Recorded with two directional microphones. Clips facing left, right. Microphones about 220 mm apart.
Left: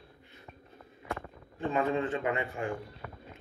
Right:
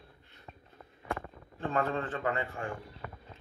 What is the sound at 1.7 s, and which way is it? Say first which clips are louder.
Speech: left 3 dB; 15° left (ahead or behind).